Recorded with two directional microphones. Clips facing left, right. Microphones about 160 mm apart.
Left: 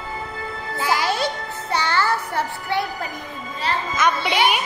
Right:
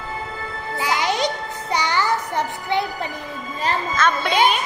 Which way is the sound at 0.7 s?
15° right (ahead or behind).